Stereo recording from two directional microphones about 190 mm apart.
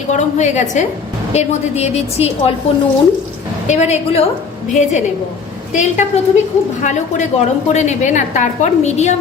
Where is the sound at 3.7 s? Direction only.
35° left (ahead or behind).